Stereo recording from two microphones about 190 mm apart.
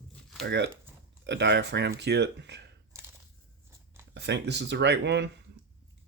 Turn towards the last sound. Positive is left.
turn(degrees=-65)  # may be behind; listen again after turning